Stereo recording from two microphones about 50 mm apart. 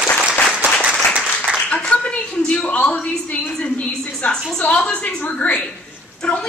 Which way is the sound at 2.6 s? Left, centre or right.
Left.